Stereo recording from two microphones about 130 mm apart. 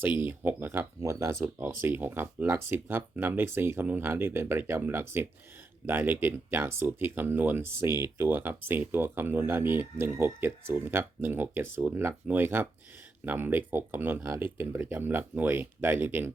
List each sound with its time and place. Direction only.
0.2 s speech: 15° right (ahead or behind)